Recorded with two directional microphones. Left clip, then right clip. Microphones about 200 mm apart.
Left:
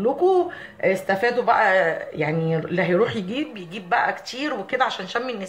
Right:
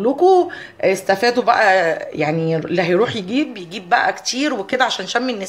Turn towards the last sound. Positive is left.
turn(degrees=-50)  # may be behind; listen again after turning